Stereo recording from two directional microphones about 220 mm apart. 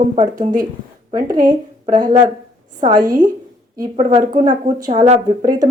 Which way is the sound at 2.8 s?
20° right (ahead or behind).